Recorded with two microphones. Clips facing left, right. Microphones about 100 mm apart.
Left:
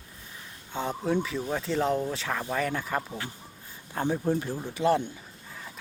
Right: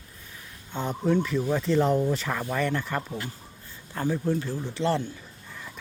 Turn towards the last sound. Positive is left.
turn(degrees=10)  # may be behind; listen again after turning